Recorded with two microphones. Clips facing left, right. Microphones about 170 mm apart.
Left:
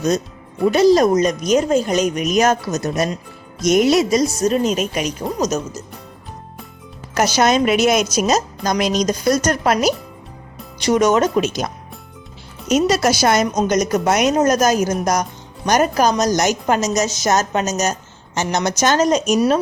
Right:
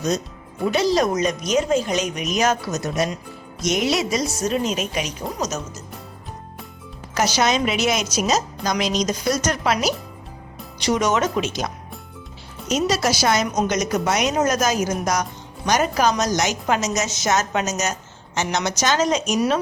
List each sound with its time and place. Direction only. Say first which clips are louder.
0.7 s speech: left 7 dB; 45° left (ahead or behind)
7.1 s speech: left 4 dB; 50° left (ahead or behind)
14.3 s a woman's voice: left 5 dB; 40° left (ahead or behind)